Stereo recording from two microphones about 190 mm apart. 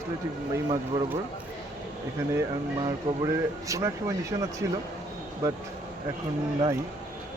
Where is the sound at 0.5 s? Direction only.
15° right (ahead or behind).